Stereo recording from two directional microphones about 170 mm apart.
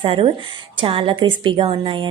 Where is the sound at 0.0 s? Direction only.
30° right (ahead or behind).